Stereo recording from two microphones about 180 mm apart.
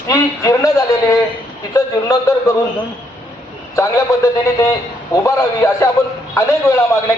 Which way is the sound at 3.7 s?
15° left (ahead or behind).